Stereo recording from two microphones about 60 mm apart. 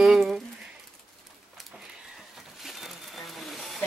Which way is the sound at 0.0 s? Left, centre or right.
Centre.